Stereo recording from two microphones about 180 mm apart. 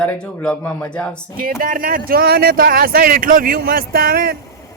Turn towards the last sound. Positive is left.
turn(degrees=-55)  # may be behind; listen again after turning